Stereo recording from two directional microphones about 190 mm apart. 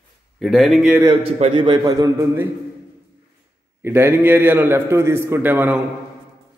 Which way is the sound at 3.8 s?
10° right (ahead or behind).